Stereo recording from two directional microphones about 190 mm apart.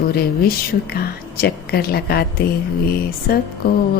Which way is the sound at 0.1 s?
55° left (ahead or behind).